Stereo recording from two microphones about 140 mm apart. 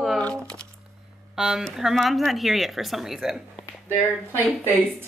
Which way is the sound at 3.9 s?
15° left (ahead or behind).